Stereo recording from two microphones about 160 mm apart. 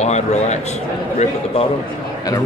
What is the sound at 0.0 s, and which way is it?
A man's voice, 45° left (ahead or behind).